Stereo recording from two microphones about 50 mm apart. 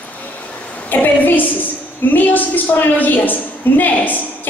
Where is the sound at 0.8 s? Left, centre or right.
Left.